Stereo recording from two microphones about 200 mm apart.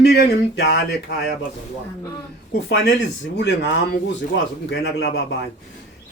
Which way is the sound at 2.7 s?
60° left (ahead or behind).